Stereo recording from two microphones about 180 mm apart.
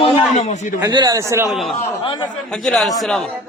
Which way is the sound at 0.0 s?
30° left (ahead or behind).